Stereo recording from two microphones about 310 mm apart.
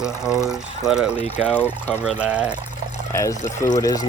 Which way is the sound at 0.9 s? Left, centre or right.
Centre.